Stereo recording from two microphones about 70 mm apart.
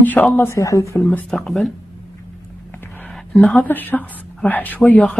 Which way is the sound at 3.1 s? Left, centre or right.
Left.